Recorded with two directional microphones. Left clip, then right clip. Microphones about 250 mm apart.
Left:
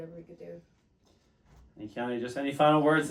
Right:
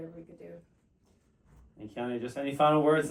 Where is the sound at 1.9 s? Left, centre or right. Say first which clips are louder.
Left 2 dB; left.